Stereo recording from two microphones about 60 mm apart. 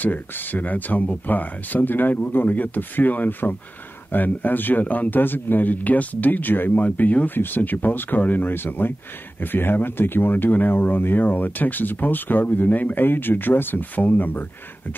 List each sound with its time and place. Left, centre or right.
0.0 s speech: left